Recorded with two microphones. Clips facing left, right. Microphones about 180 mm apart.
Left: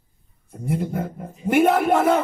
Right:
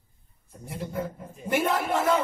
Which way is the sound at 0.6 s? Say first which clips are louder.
Left 7 dB; 55° left (ahead or behind).